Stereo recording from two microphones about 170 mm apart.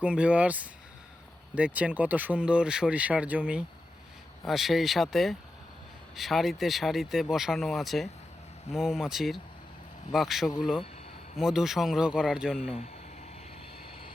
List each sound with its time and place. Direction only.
0.0 s speech: 5° right (ahead or behind)
12.5 s speech: 35° left (ahead or behind)